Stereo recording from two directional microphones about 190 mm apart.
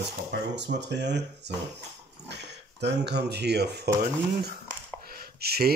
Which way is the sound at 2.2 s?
65° right (ahead or behind).